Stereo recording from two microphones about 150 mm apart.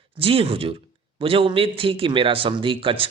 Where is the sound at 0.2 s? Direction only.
40° right (ahead or behind).